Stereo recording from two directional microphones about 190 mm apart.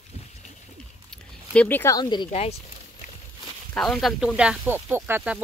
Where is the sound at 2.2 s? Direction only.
35° left (ahead or behind).